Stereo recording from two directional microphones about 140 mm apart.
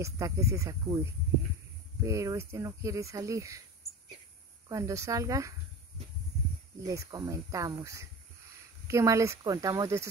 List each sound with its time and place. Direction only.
0.0 s speech: 20° right (ahead or behind)
4.6 s speech: 25° right (ahead or behind)
6.9 s speech: 25° right (ahead or behind)